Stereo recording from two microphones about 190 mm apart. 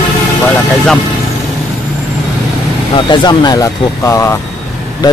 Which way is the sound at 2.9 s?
25° left (ahead or behind).